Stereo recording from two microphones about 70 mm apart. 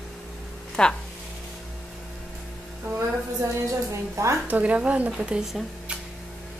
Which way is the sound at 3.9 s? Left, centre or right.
Right.